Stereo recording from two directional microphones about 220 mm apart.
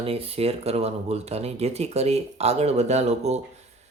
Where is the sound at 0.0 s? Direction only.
25° right (ahead or behind).